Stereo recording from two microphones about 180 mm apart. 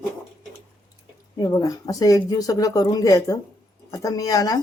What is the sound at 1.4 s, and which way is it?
Speech, 20° left (ahead or behind).